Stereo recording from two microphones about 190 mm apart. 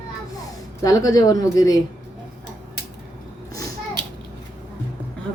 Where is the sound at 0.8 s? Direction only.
20° left (ahead or behind).